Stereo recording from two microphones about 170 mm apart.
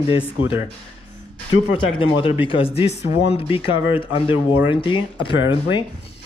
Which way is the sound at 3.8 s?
10° right (ahead or behind).